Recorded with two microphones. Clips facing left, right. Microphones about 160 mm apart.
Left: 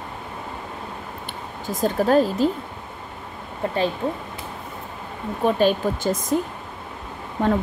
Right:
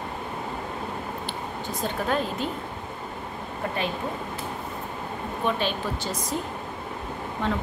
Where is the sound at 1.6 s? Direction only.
40° left (ahead or behind).